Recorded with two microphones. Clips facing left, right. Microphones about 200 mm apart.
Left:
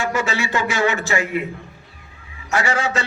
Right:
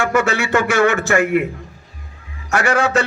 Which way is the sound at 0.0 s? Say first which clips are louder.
Right 5 dB; 55° right (ahead or behind).